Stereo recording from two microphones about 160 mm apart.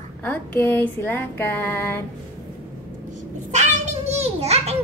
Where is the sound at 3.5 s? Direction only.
45° right (ahead or behind).